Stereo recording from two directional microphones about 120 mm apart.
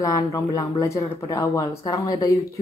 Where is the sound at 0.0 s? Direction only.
30° left (ahead or behind).